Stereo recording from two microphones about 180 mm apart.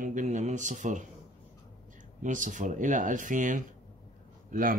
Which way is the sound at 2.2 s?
45° right (ahead or behind).